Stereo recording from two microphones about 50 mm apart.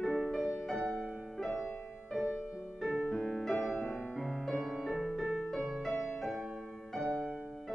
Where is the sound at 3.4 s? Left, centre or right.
Centre.